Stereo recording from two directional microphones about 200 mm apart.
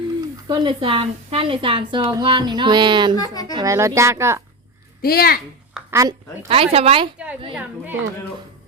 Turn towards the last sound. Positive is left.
turn(degrees=-10)  # may be behind; listen again after turning